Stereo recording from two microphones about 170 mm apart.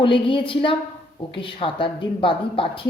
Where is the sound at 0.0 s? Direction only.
30° left (ahead or behind).